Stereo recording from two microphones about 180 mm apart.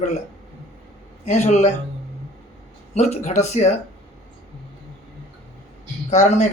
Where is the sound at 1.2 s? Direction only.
40° left (ahead or behind).